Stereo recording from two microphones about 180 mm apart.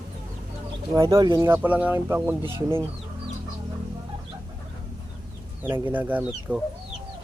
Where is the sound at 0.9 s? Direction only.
20° right (ahead or behind).